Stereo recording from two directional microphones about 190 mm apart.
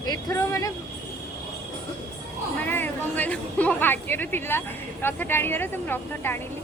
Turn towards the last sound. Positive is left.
turn(degrees=10)  # may be behind; listen again after turning